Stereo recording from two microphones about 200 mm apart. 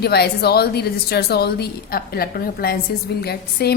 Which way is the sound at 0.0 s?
55° left (ahead or behind).